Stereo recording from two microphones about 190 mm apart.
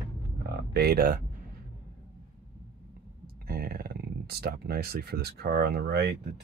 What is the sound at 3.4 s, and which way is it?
Speech, 50° right (ahead or behind).